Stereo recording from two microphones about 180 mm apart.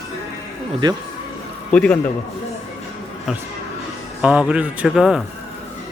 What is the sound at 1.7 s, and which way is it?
Speech, 5° left (ahead or behind).